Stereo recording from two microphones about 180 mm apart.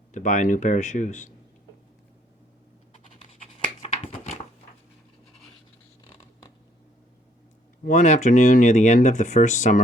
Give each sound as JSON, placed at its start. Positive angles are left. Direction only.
{"t": 0.1, "sound": "speech", "side_deg": 45}
{"t": 4.0, "sound": "a sound", "side_deg": 40}
{"t": 7.9, "sound": "speech", "side_deg": 45}